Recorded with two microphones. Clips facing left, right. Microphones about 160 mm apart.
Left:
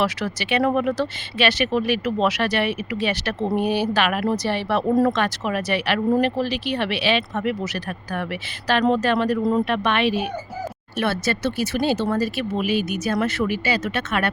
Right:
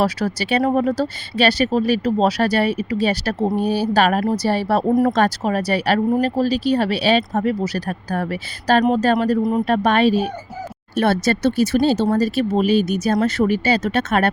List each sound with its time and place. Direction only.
0.0 s speech: 35° right (ahead or behind)
9.4 s speech: 20° right (ahead or behind)
9.6 s speech: 35° right (ahead or behind)